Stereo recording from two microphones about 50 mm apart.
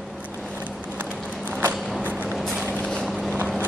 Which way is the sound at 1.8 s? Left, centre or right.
Centre.